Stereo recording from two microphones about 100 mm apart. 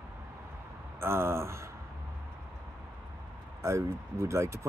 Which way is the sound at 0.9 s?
25° right (ahead or behind).